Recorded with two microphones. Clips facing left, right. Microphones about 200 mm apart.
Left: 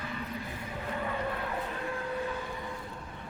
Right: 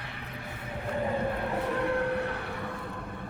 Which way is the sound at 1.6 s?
70° right (ahead or behind).